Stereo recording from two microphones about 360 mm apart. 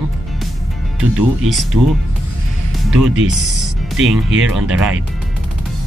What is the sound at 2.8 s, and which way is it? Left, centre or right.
Speech, centre.